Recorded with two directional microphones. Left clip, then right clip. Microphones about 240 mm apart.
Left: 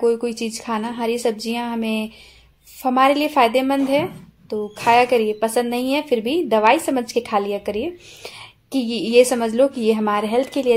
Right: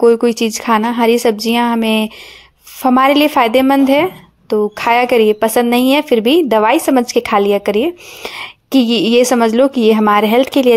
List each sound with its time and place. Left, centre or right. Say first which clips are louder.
0.0 s a woman's voice: right 9 dB; right